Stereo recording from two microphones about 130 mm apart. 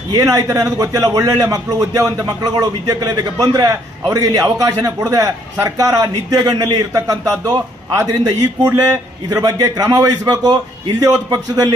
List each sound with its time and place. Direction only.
0.1 s a man's voice: 30° right (ahead or behind)